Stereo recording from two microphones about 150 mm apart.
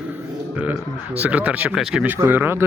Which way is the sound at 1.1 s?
10° right (ahead or behind).